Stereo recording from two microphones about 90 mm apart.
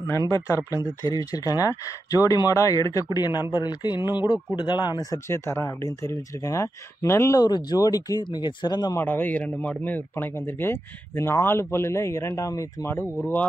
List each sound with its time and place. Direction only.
0.3 s speech: 35° left (ahead or behind); by 5.0 s 55° left (ahead or behind)
5.1 s speech: 30° left (ahead or behind)
7.4 s speech: 45° left (ahead or behind)
8.9 s speech: 25° left (ahead or behind)
12.9 s speech: 20° left (ahead or behind)